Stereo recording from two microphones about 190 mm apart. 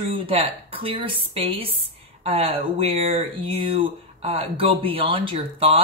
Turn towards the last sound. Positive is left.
turn(degrees=-30)  # may be behind; listen again after turning